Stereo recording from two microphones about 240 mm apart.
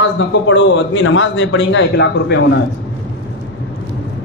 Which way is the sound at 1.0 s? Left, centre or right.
Left.